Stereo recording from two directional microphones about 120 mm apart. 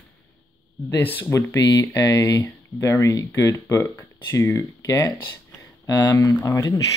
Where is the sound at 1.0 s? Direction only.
15° left (ahead or behind).